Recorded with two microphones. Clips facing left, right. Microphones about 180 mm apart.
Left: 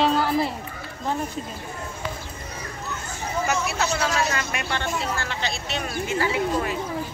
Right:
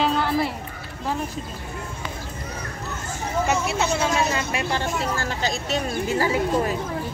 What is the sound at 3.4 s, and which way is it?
Speech, 25° right (ahead or behind).